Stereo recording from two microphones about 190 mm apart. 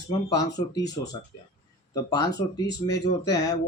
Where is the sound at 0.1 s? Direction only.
20° left (ahead or behind).